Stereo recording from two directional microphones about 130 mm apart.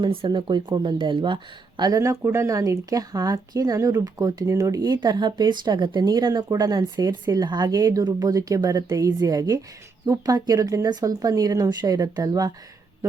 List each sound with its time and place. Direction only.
0.0 s speech: 40° right (ahead or behind)